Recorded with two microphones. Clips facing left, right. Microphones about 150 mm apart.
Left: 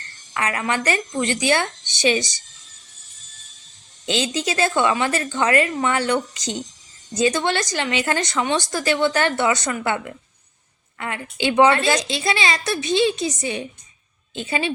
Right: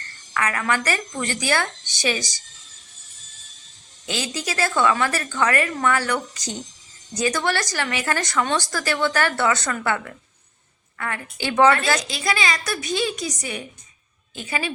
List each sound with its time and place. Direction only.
0.3 s a woman's voice: 20° left (ahead or behind)
4.0 s a woman's voice: 25° left (ahead or behind)